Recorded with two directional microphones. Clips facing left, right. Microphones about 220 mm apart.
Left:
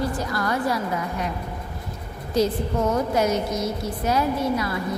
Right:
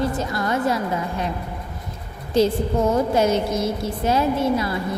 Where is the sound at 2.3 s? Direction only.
25° right (ahead or behind).